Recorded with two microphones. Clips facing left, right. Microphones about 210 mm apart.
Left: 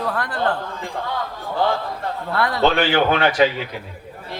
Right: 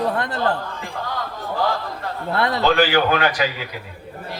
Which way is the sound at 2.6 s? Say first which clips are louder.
Even; 25° left (ahead or behind).